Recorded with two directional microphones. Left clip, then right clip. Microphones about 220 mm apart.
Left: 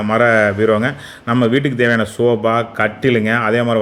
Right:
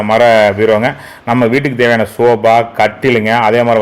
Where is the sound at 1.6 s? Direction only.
Centre (ahead or behind).